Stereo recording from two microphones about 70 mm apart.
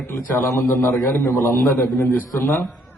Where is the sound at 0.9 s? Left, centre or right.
Left.